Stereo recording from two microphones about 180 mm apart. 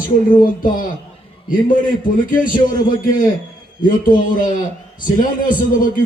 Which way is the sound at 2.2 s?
50° left (ahead or behind).